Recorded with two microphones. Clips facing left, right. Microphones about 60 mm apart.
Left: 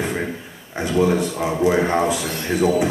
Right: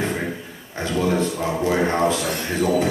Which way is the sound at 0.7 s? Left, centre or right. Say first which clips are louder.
Left 3 dB; centre.